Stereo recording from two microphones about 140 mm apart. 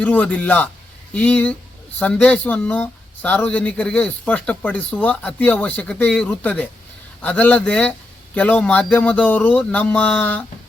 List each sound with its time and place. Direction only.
0.0 s speech: 10° left (ahead or behind)